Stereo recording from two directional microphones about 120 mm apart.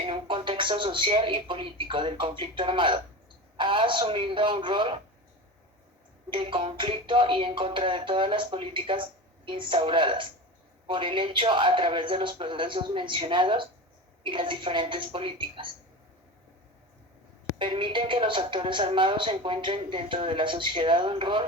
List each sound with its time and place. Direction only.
0.0 s speech: 45° right (ahead or behind)
6.3 s speech: 45° right (ahead or behind)
17.6 s speech: 45° right (ahead or behind)